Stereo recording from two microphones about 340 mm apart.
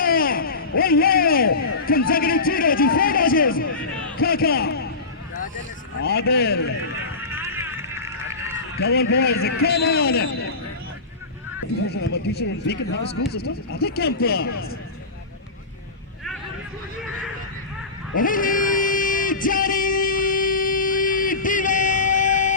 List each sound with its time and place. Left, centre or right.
0.0 s a sound: left
0.8 s speech: left
1.5 s a man's voice: left
1.8 s speech: left
6.0 s speech: left
7.2 s run: centre
8.8 s speech: left
11.9 s speech: left
18.2 s music: left